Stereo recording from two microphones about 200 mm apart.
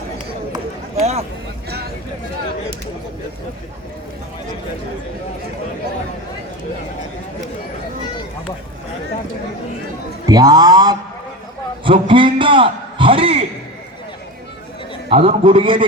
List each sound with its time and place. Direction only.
0.9 s a sound: 30° right (ahead or behind)
10.2 s a man's voice: 20° right (ahead or behind)
15.1 s a man's voice: 30° right (ahead or behind)